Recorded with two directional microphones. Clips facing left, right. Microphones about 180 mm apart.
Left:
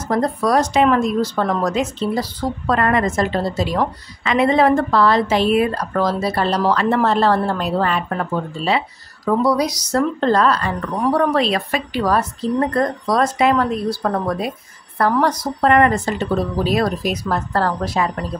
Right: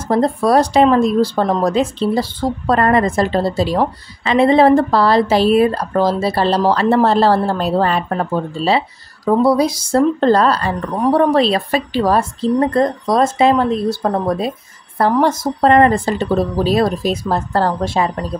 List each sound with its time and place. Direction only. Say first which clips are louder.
0.1 s a woman's voice: right 4 dB; 30° right (ahead or behind)